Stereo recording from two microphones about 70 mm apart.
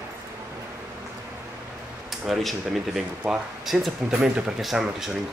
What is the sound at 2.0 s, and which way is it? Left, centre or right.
Speech, centre.